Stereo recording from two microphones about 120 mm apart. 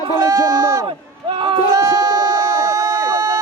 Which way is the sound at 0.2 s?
25° right (ahead or behind).